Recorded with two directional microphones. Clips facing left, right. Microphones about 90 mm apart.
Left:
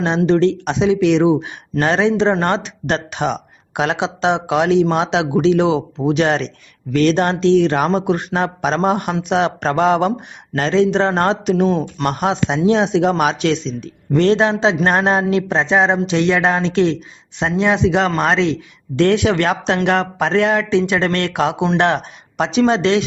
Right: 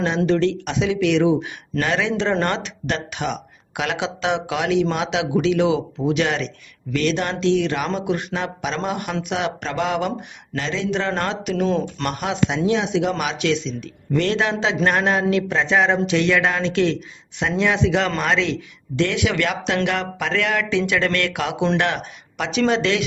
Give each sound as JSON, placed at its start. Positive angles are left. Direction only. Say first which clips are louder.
{"t": 0.3, "sound": "speech", "louder": "left 5 dB", "side_deg": 30}
{"t": 11.6, "sound": "speech", "louder": "left 4 dB", "side_deg": 15}
{"t": 12.0, "sound": "speech", "louder": "left 7 dB", "side_deg": 35}